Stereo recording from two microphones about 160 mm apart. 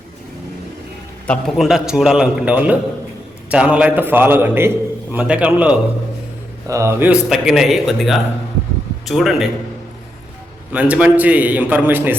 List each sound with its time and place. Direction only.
1.3 s a man's voice: centre (ahead or behind)
6.7 s a man's voice: 20° right (ahead or behind)
7.1 s a man's voice: centre (ahead or behind)
10.7 s a man's voice: 10° right (ahead or behind)